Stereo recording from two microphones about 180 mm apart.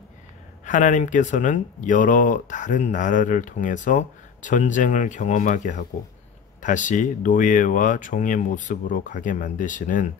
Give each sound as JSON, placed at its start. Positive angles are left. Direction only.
{"t": 0.7, "sound": "speech", "side_deg": 45}